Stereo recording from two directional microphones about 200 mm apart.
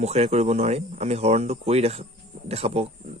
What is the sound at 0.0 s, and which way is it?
Speech, 30° right (ahead or behind).